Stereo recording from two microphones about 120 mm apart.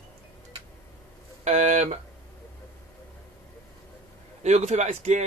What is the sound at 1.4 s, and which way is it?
Speech, 75° right (ahead or behind).